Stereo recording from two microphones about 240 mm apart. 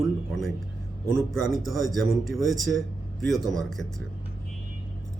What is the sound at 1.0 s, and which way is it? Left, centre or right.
A man's voice, centre.